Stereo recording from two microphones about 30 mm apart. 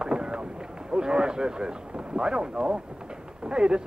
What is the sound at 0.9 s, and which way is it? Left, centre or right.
Speech, right.